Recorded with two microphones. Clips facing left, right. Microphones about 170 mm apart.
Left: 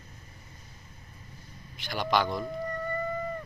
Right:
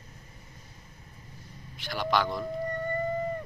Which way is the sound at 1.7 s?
Centre (ahead or behind).